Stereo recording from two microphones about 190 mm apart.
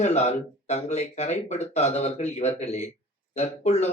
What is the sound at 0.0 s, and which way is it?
A man's voice, 35° left (ahead or behind).